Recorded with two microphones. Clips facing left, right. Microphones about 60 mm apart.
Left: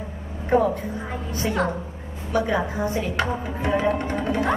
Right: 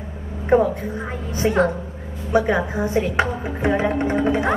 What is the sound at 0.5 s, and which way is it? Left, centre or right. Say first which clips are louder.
A woman's voice: right 3 dB; right.